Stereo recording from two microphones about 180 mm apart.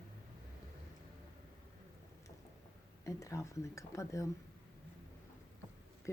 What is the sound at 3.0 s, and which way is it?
Speech, 15° left (ahead or behind).